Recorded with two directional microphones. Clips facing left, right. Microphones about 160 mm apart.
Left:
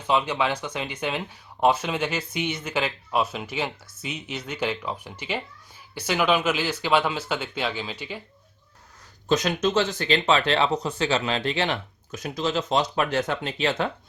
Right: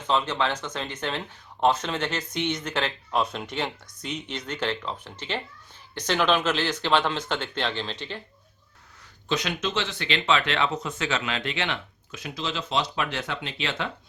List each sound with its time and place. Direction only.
0.0 s speech: 10° left (ahead or behind)
9.3 s speech: 40° left (ahead or behind)